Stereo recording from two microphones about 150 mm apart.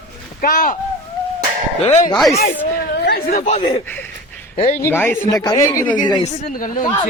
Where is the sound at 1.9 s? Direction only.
50° left (ahead or behind).